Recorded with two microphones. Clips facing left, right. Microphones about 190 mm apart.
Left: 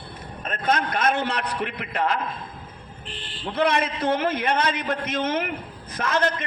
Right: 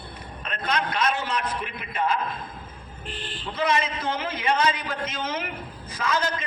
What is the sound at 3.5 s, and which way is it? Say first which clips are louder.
A man's voice: left 3 dB; 60° left (ahead or behind).